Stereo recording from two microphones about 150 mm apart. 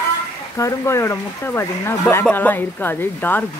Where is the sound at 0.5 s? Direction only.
20° left (ahead or behind).